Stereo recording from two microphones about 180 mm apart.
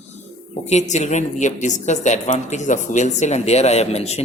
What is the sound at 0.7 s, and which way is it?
A woman's voice, 40° left (ahead or behind).